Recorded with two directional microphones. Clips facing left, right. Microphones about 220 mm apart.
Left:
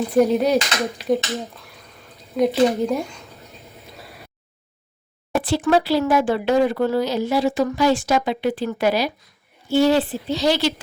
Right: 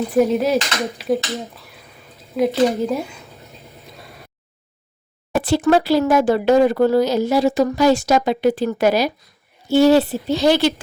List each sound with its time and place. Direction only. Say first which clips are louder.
0.1 s speech: even; centre (ahead or behind)
5.4 s speech: right 3 dB; 45° right (ahead or behind)